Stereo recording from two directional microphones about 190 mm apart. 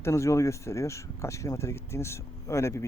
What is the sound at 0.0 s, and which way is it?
Speech, 15° left (ahead or behind).